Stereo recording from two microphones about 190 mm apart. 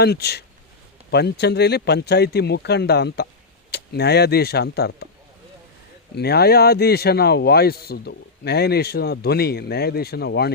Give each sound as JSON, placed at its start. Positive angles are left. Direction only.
{"t": 0.0, "sound": "speech", "side_deg": 55}
{"t": 6.1, "sound": "speech", "side_deg": 55}